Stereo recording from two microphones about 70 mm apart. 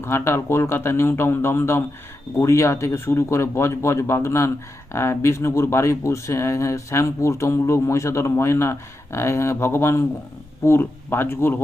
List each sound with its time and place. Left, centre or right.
0.0 s speech: left